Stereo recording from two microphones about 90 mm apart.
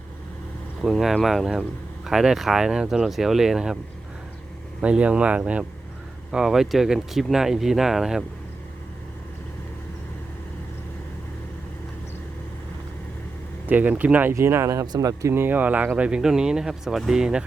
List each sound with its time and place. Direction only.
0.8 s speech: centre (ahead or behind)
4.8 s speech: 15° right (ahead or behind)
13.7 s speech: 20° right (ahead or behind)
14.3 s speech: 30° right (ahead or behind)
15.3 s speech: 25° right (ahead or behind); by 17.4 s 10° right (ahead or behind)